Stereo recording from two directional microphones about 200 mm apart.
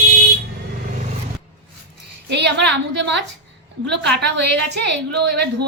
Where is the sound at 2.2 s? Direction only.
60° right (ahead or behind).